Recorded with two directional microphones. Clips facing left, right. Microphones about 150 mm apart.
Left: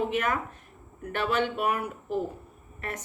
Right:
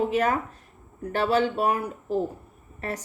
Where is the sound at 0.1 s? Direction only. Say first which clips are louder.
Right 4 dB; 35° right (ahead or behind).